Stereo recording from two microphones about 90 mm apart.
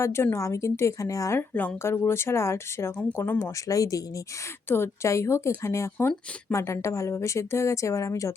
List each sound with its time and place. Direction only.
0.0 s speech: 25° left (ahead or behind)
1.4 s speech: 20° left (ahead or behind)
3.7 s speech: 40° left (ahead or behind)
4.7 s speech: 30° left (ahead or behind)